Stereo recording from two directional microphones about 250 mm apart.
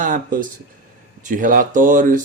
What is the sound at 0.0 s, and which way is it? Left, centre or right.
Speech, right.